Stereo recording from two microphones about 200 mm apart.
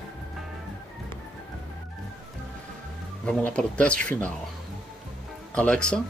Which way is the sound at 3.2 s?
5° left (ahead or behind).